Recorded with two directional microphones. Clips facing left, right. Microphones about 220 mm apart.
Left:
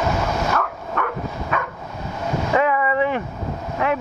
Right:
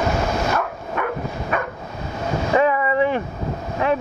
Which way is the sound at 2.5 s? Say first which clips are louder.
Right 2 dB; 30° right (ahead or behind).